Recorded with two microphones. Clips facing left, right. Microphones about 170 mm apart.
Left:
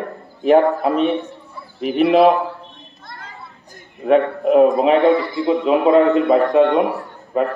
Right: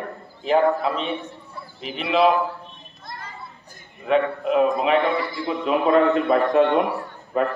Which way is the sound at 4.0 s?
45° left (ahead or behind).